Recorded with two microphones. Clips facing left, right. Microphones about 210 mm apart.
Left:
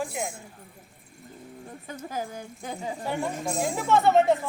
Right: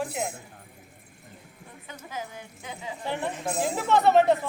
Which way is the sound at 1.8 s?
40° left (ahead or behind).